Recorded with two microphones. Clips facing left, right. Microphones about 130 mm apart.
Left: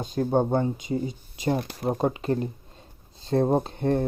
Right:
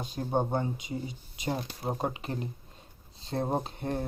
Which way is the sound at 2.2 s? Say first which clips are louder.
Left 10 dB; 40° left (ahead or behind).